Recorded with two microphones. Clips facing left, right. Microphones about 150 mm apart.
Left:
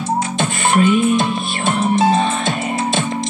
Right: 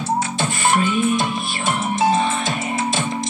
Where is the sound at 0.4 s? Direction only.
20° left (ahead or behind).